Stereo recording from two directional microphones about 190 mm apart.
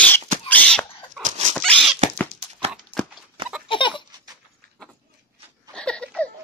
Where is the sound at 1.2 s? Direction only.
40° right (ahead or behind).